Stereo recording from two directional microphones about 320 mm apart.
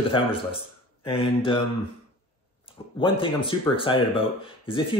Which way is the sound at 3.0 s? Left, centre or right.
Centre.